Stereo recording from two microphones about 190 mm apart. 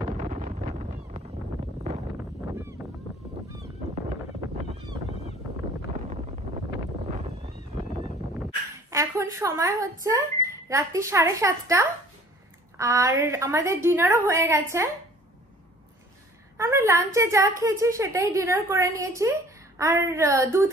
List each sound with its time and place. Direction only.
0.2 s wind noise: 40° right (ahead or behind)
7.1 s cat: 35° right (ahead or behind)
8.9 s speech: 15° right (ahead or behind)
16.5 s speech: 15° right (ahead or behind)